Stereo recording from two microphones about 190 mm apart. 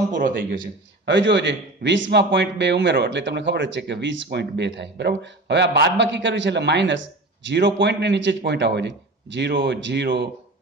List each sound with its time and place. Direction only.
0.1 s a man's voice: 45° right (ahead or behind)
1.0 s a man's voice: 65° right (ahead or behind)